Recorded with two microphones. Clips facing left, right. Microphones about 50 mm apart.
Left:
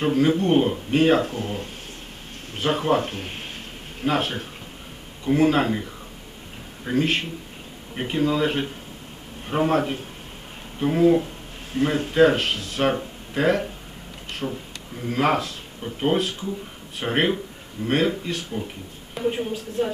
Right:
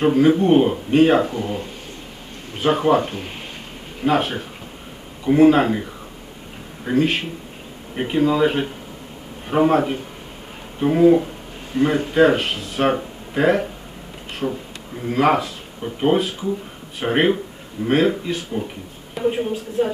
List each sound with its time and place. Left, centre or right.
0.0 s speech: centre
1.2 s speech: right
2.6 s speech: centre
4.0 s speech: centre